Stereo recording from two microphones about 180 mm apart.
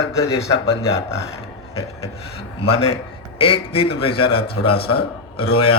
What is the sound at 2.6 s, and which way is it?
Speech, 30° left (ahead or behind).